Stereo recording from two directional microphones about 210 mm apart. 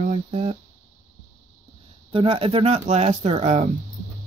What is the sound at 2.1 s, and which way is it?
Speech, 25° right (ahead or behind).